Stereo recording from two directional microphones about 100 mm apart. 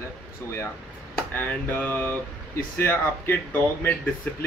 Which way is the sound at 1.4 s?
20° left (ahead or behind).